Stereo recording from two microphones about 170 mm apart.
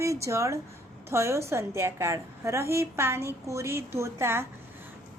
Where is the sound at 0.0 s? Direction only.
15° right (ahead or behind).